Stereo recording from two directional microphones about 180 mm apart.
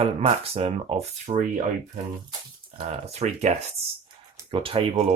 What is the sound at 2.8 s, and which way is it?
Speech, 35° right (ahead or behind).